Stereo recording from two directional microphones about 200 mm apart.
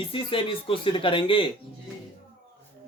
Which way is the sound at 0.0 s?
25° left (ahead or behind).